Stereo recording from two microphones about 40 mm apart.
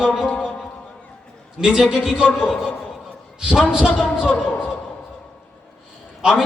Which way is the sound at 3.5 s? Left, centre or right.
Right.